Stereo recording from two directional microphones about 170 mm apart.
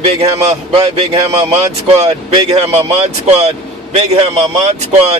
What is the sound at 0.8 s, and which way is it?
Speech, 35° right (ahead or behind).